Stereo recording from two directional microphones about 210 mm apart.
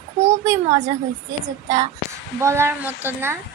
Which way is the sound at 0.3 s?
15° right (ahead or behind).